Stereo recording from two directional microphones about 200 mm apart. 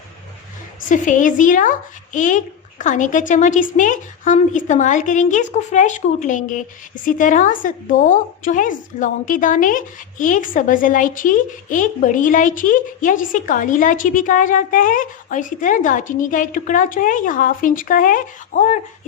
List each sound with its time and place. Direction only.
0.8 s a woman's voice: 40° left (ahead or behind)